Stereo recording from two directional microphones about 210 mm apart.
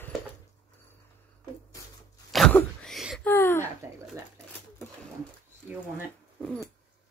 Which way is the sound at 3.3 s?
10° left (ahead or behind).